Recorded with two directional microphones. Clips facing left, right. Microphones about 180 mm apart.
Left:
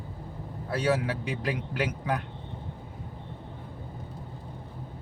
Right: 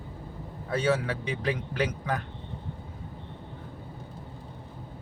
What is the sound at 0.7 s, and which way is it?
Speech, 10° left (ahead or behind).